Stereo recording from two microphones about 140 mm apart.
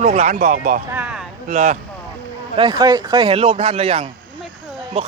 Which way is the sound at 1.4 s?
65° right (ahead or behind).